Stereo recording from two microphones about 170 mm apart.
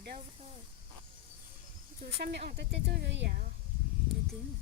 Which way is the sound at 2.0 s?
75° right (ahead or behind).